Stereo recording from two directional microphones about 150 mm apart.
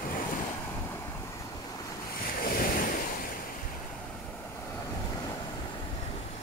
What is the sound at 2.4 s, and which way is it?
Waves, 75° left (ahead or behind).